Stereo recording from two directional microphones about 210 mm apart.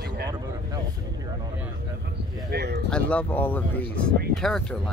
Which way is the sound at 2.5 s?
50° right (ahead or behind).